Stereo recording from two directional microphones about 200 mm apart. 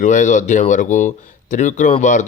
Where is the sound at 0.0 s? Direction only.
40° left (ahead or behind).